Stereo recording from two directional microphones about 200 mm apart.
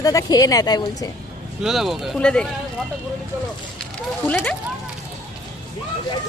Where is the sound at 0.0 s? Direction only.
15° left (ahead or behind).